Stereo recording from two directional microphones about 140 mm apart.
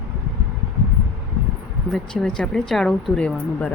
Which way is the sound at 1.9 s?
5° left (ahead or behind).